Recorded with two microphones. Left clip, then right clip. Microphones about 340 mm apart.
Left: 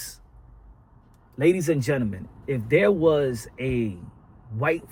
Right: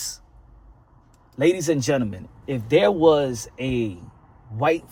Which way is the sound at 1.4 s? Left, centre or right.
Centre.